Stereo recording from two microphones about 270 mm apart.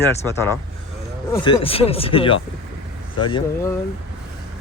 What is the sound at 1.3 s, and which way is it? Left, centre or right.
Speech, centre.